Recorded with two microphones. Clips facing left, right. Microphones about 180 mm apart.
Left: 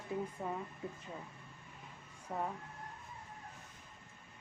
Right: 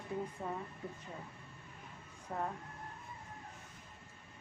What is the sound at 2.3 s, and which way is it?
Speech, 10° left (ahead or behind).